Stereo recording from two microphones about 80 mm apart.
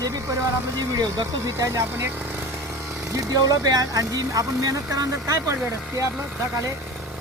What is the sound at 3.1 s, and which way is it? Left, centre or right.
Speech, right.